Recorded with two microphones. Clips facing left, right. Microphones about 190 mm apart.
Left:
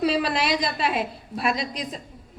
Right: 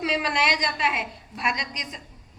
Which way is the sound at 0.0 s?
35° left (ahead or behind).